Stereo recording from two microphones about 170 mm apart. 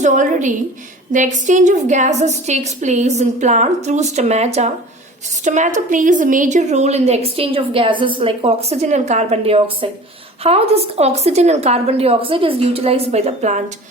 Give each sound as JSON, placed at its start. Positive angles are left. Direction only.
{"t": 0.0, "sound": "a woman's voice", "side_deg": -45}